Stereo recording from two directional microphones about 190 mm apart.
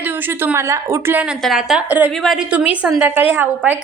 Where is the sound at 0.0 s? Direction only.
10° right (ahead or behind).